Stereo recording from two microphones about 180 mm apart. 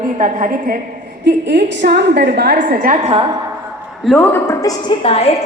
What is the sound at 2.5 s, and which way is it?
Speech, 50° right (ahead or behind).